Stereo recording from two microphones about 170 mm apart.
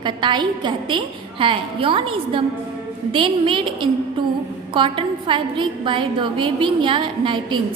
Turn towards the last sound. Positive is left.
turn(degrees=-30)  # may be behind; listen again after turning